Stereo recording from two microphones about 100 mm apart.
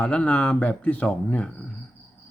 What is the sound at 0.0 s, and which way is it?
A man's voice, 10° left (ahead or behind).